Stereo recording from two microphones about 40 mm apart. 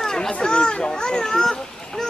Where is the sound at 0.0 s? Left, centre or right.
Centre.